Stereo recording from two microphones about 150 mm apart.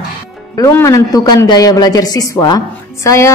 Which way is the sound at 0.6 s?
20° left (ahead or behind).